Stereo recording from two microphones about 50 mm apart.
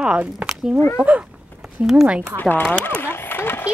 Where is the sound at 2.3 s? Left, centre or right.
Left.